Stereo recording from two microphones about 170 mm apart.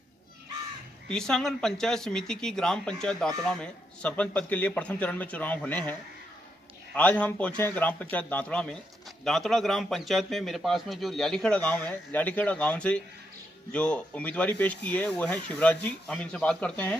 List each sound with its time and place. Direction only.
1.0 s speech: 5° left (ahead or behind)
7.0 s speech: 10° left (ahead or behind)